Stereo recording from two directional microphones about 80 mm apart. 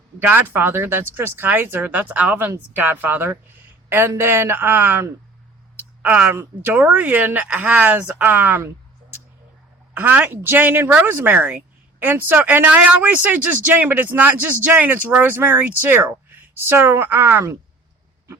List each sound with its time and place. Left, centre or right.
0.2 s speech: right
5.7 s a sound: right
6.2 s a woman's voice: right
6.6 s speech: right